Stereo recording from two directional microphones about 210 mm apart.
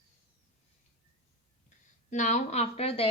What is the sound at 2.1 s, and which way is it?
A woman's voice, 35° left (ahead or behind).